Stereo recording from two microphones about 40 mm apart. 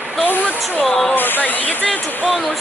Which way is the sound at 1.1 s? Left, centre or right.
Left.